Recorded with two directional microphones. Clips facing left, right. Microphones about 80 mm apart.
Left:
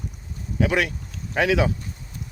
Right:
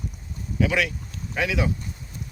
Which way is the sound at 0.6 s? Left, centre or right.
Left.